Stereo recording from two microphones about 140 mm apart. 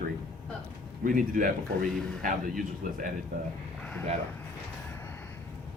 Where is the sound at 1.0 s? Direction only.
80° right.